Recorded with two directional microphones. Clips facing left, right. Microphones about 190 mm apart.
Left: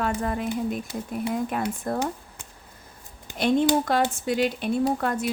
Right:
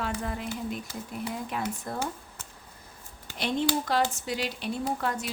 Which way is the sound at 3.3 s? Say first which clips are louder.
Left 7 dB; 50° left (ahead or behind).